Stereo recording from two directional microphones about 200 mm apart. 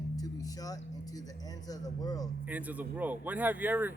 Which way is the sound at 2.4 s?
10° right (ahead or behind).